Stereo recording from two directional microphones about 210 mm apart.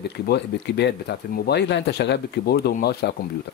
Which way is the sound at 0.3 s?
50° left (ahead or behind).